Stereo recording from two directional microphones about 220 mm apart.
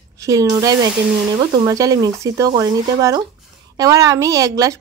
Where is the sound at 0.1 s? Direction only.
15° right (ahead or behind).